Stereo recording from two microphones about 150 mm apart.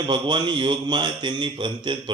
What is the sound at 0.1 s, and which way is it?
A man's voice, 30° right (ahead or behind).